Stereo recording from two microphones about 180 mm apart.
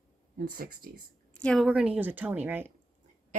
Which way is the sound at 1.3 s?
5° left (ahead or behind).